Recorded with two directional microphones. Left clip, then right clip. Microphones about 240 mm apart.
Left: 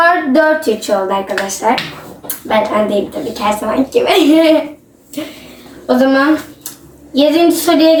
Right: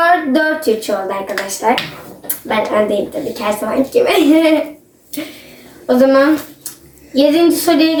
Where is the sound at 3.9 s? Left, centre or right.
Centre.